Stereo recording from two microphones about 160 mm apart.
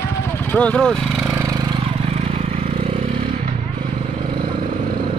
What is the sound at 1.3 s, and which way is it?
Vehicle, 25° right (ahead or behind).